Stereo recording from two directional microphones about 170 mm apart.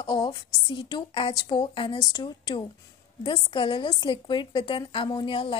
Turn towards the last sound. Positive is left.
turn(degrees=30)  # may be behind; listen again after turning